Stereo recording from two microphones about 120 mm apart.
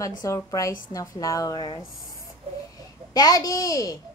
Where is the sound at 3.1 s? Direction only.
35° left (ahead or behind).